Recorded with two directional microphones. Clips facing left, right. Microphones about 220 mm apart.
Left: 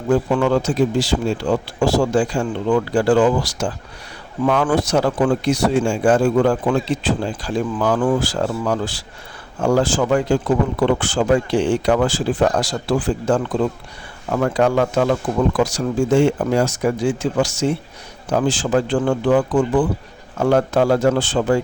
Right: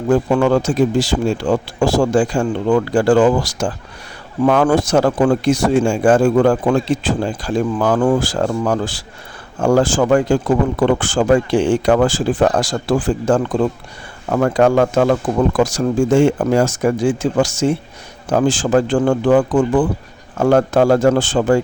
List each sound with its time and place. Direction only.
0.1 s speech: 45° right (ahead or behind)